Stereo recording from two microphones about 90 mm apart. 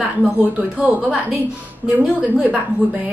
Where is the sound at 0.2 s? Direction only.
15° right (ahead or behind).